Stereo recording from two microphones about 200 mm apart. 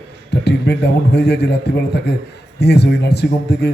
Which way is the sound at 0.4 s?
55° left (ahead or behind).